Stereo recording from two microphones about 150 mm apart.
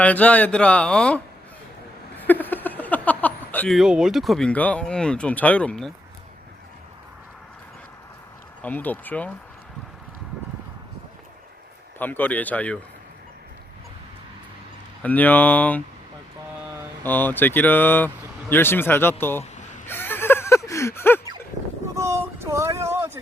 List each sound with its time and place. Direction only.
0.0 s speech: 10° left (ahead or behind)
2.1 s a sound: 10° left (ahead or behind)
3.8 s speech: 5° right (ahead or behind)
8.6 s speech: 10° left (ahead or behind)
11.9 s speech: 10° left (ahead or behind)
15.0 s speech: 10° left (ahead or behind)
17.0 s speech: 10° left (ahead or behind)
19.5 s chuckle: 55° left (ahead or behind)
19.9 s a sound: 15° left (ahead or behind)
21.9 s a sound: 20° right (ahead or behind)